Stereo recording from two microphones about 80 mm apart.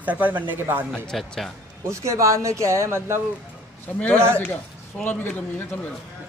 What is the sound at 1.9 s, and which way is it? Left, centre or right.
Speech, right.